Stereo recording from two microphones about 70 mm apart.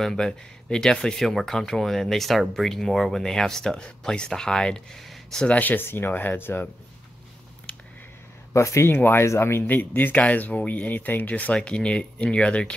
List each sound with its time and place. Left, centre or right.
0.0 s speech: centre
5.4 s speech: left
7.7 s a sound: centre
8.5 s speech: left
8.8 s speech: left; by 12.7 s centre